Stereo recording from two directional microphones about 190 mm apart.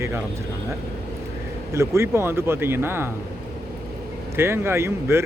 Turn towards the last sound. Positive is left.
turn(degrees=-15)  # may be behind; listen again after turning